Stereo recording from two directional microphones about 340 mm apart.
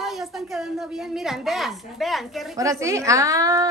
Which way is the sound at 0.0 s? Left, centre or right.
Centre.